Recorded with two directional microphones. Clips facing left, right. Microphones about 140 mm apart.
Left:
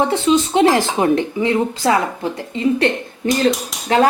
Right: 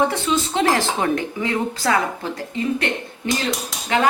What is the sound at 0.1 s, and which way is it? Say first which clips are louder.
Speech: left 7 dB; 20° left (ahead or behind).